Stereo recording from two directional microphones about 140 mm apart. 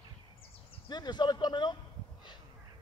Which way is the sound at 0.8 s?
30° left (ahead or behind).